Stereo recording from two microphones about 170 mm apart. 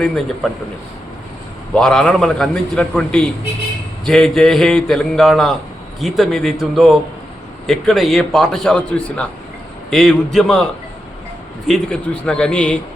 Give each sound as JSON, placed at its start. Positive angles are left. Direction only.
{"t": 0.4, "sound": "a man's voice", "side_deg": 5}
{"t": 1.7, "sound": "a man's voice", "side_deg": 5}
{"t": 11.7, "sound": "a man's voice", "side_deg": 5}